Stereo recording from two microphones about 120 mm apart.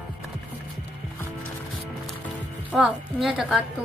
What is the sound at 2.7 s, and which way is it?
Speech, centre (ahead or behind).